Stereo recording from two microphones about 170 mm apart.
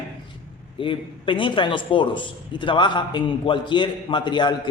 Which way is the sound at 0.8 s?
30° left (ahead or behind).